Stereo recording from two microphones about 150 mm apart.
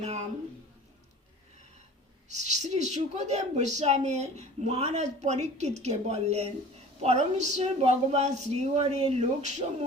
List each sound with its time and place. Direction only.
2.3 s a woman's voice: 50° right (ahead or behind)